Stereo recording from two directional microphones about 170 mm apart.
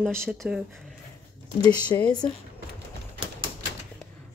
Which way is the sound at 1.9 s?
25° left (ahead or behind).